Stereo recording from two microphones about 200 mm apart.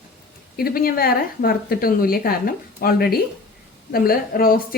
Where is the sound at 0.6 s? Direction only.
50° left (ahead or behind).